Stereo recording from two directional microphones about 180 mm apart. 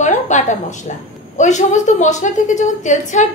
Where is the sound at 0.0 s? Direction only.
40° left (ahead or behind).